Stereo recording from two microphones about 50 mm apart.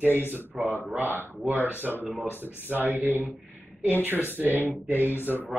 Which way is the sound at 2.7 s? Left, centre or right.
Right.